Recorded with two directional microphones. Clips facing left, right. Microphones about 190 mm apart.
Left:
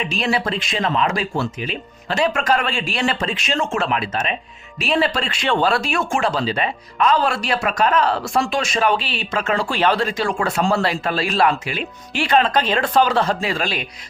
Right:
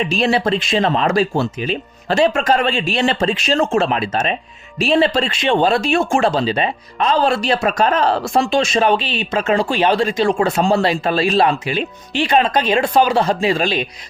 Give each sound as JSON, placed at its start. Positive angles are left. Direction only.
{"t": 0.0, "sound": "speech", "side_deg": -30}